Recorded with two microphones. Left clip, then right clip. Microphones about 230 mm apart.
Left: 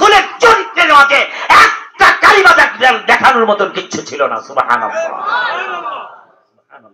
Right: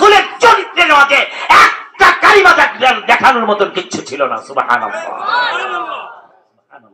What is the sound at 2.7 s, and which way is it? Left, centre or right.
Speech, left.